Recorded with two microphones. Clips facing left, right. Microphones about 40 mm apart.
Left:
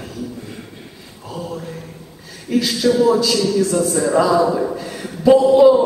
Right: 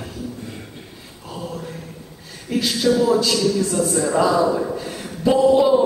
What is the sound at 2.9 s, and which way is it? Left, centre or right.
A man's voice, centre.